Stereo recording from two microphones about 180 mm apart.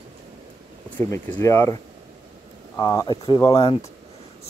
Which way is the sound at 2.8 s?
20° left (ahead or behind).